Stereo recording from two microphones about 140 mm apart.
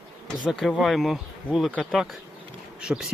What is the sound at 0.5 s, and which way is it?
Speech, 5° left (ahead or behind).